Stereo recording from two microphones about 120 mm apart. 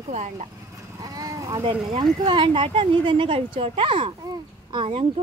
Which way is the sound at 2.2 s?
45° right (ahead or behind).